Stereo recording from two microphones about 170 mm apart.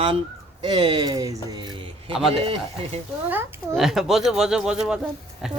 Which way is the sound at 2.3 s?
35° right (ahead or behind).